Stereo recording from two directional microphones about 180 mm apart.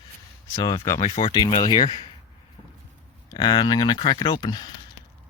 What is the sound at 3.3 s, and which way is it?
Speech, 25° left (ahead or behind).